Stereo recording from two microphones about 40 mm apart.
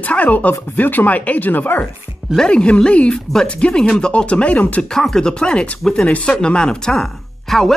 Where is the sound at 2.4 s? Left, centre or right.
Left.